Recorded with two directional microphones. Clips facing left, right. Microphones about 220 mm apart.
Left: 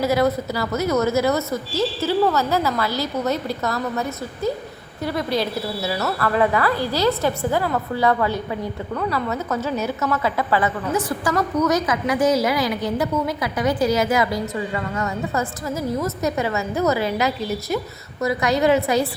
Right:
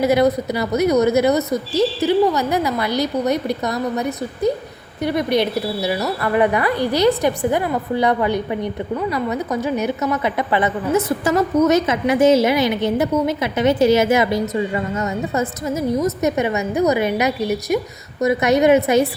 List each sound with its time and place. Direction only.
0.0 s a woman's voice: 20° right (ahead or behind)
5.0 s a woman's voice: 20° right (ahead or behind)